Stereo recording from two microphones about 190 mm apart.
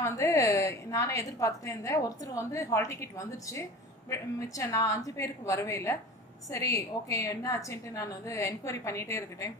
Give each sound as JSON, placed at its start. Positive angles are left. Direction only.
{"t": 0.0, "sound": "a woman's voice", "side_deg": 15}